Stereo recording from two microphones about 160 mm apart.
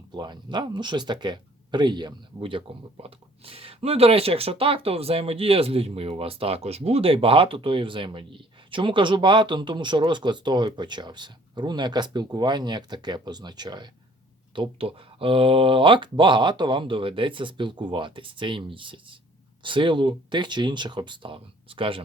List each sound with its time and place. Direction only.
0.1 s speech: 30° right (ahead or behind)